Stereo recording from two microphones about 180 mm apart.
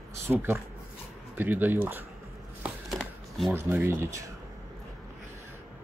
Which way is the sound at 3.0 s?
Centre (ahead or behind).